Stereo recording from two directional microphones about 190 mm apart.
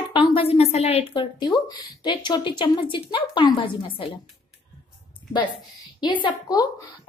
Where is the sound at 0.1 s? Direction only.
25° left (ahead or behind).